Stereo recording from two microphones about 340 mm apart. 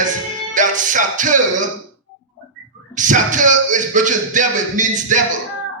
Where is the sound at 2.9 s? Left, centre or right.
Right.